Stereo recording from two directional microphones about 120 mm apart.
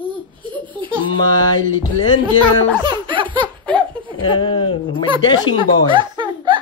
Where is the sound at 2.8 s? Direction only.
40° right (ahead or behind).